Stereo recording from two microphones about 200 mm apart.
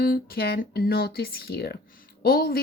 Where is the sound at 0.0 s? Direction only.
50° left (ahead or behind).